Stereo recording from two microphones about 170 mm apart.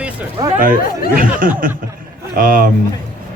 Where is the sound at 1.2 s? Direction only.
55° right (ahead or behind).